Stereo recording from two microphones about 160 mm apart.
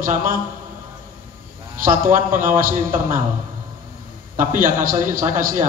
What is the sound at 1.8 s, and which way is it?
A man's voice, 55° right (ahead or behind).